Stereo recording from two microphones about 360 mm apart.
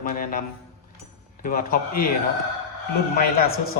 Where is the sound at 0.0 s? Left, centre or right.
Left.